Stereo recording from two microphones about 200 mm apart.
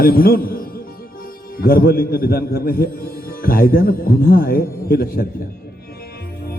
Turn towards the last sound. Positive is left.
turn(degrees=50)  # may be behind; listen again after turning